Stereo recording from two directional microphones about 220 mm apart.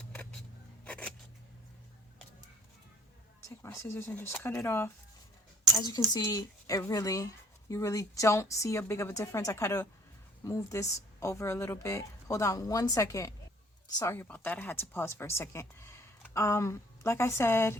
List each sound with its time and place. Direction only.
0.0 s a sound: 5° left (ahead or behind)
0.9 s scissors: 5° left (ahead or behind)
3.6 s speech: 10° left (ahead or behind)